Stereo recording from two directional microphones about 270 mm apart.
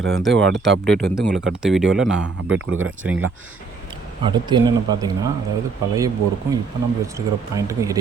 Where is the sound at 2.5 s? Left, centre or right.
Right.